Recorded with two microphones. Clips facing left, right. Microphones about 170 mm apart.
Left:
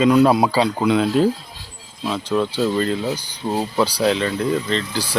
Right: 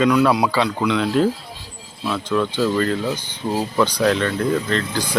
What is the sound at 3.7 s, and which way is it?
Speech, 35° left (ahead or behind).